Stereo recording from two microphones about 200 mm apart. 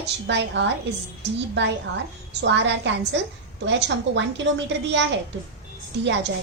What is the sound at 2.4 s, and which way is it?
A woman's voice, 60° right (ahead or behind).